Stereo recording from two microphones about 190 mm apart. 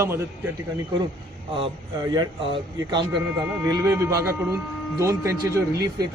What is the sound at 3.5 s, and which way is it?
A man's voice, 15° right (ahead or behind).